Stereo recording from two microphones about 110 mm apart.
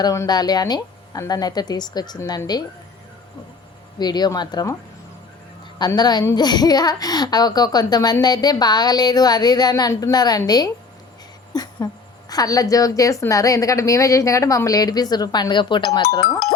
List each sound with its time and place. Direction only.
0.0 s speech: 35° left (ahead or behind)
3.9 s speech: 40° left (ahead or behind)
6.0 s speech: 40° left (ahead or behind)
11.5 s a sound: 35° left (ahead or behind)
12.3 s speech: 35° left (ahead or behind)
15.9 s speech: 35° left (ahead or behind)